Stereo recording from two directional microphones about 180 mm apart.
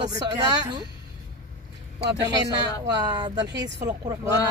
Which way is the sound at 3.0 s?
25° right (ahead or behind).